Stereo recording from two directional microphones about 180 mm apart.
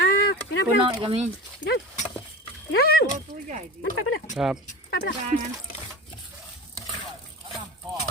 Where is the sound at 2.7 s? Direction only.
60° left (ahead or behind).